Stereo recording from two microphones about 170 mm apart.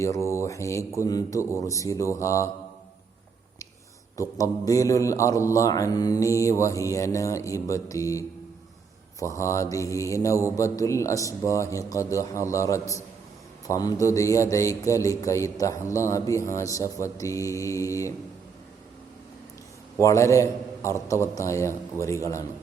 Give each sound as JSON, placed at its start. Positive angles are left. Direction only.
{"t": 0.0, "sound": "mantra", "side_deg": 15}
{"t": 4.2, "sound": "speech", "side_deg": 20}
{"t": 20.0, "sound": "mantra", "side_deg": 15}
{"t": 22.0, "sound": "speech", "side_deg": 20}